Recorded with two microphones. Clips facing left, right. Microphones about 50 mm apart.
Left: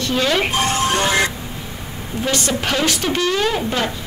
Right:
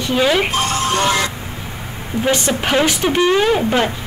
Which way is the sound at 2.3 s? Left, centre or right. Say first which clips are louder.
Right 3 dB; centre.